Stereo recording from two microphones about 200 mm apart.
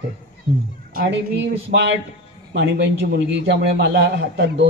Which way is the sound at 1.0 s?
45° right (ahead or behind).